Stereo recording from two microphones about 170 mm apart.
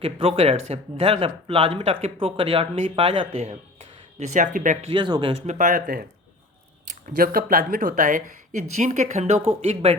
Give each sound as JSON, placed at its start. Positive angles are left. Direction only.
{"t": 0.0, "sound": "speech", "side_deg": -35}
{"t": 4.9, "sound": "speech", "side_deg": -25}
{"t": 5.5, "sound": "speech", "side_deg": -50}
{"t": 7.2, "sound": "speech", "side_deg": -55}